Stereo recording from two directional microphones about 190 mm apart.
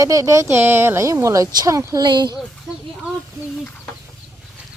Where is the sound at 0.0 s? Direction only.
15° right (ahead or behind).